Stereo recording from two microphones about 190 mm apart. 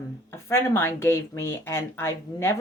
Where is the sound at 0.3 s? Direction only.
15° left (ahead or behind).